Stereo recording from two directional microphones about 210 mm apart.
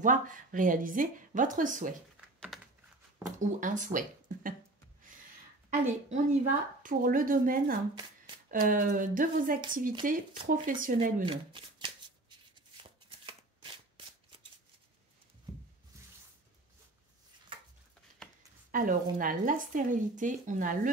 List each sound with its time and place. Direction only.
0.0 s a woman's voice: 40° right (ahead or behind)
2.1 s typing: centre (ahead or behind)
3.3 s a woman's voice: 35° right (ahead or behind)
5.7 s a woman's voice: 35° right (ahead or behind)
11.2 s shuffling cards: 25° right (ahead or behind)
15.9 s a sound: 15° right (ahead or behind)
18.7 s a woman's voice: 40° right (ahead or behind)